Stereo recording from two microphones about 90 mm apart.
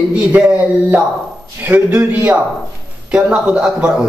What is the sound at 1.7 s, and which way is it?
A man's voice, 20° right (ahead or behind).